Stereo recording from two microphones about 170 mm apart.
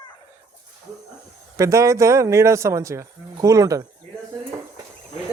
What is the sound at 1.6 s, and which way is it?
Speech, 20° right (ahead or behind).